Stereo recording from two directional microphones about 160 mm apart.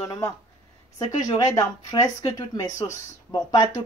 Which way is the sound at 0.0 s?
20° left (ahead or behind).